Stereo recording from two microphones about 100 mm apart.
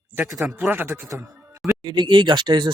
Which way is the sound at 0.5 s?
20° right (ahead or behind).